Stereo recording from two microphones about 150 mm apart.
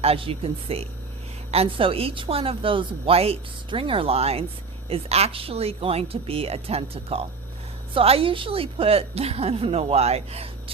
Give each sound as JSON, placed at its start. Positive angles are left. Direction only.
{"t": 0.0, "sound": "a woman's voice", "side_deg": -40}